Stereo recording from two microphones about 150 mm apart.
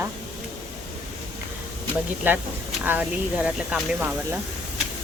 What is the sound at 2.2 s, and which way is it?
Speech, 10° right (ahead or behind).